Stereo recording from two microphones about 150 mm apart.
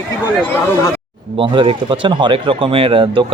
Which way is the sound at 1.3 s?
35° right (ahead or behind).